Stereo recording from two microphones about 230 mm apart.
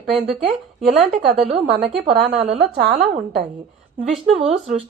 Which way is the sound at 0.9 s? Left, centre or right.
Right.